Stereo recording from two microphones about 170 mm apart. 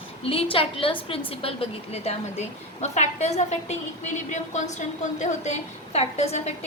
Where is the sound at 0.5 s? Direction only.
30° left (ahead or behind).